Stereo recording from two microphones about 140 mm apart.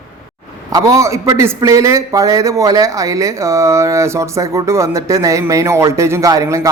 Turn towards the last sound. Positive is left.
turn(degrees=-20)  # may be behind; listen again after turning